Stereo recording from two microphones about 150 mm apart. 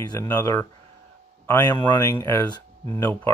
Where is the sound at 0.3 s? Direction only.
15° left (ahead or behind).